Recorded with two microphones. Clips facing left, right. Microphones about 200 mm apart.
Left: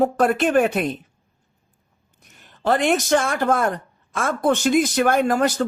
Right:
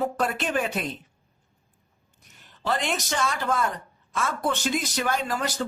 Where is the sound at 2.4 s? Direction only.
55° left (ahead or behind).